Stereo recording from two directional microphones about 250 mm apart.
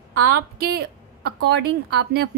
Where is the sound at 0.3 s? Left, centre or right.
Right.